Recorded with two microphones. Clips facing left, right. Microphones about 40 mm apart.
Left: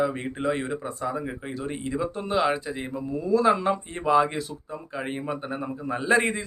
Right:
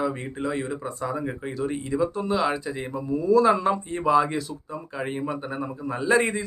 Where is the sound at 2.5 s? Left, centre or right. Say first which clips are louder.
Even; centre.